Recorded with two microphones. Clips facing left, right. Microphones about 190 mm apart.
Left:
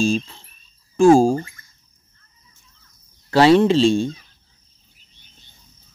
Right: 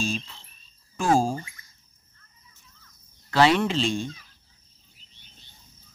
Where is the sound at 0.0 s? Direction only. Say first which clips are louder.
Left 10 dB; 30° left (ahead or behind).